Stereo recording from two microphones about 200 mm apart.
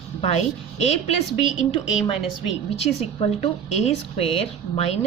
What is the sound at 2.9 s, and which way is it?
A woman's voice, 30° left (ahead or behind).